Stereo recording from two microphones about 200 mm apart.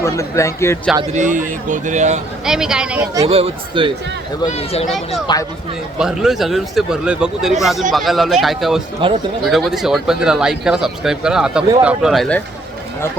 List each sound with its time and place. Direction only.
0.0 s a man's voice: 15° left (ahead or behind)
1.1 s a man's voice: 40° right (ahead or behind)
2.4 s speech: 5° right (ahead or behind)
3.2 s speech: 30° right (ahead or behind)
4.4 s speech: 30° left (ahead or behind)
4.9 s speech: centre (ahead or behind)
9.0 s speech: 25° right (ahead or behind)
9.4 s speech: centre (ahead or behind)